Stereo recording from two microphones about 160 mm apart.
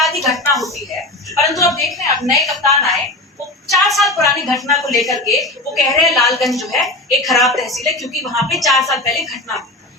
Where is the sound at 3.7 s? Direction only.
Centre (ahead or behind).